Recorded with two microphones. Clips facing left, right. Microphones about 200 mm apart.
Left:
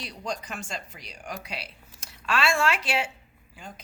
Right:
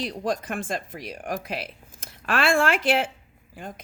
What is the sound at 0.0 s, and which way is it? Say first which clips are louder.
A woman's voice: right 7 dB; 50° right (ahead or behind).